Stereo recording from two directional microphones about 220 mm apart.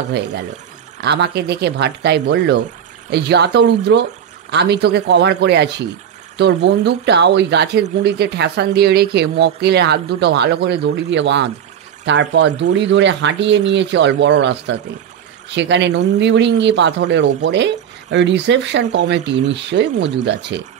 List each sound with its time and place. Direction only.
0.1 s speech: 50° right (ahead or behind)